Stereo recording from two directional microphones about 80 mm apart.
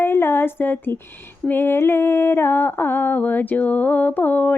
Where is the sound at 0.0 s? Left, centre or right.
Left.